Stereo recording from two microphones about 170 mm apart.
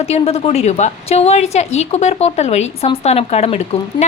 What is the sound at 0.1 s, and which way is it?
A woman's voice, 35° left (ahead or behind).